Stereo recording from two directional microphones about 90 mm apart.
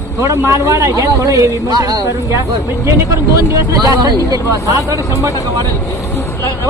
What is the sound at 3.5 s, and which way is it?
A man's voice, 45° right (ahead or behind).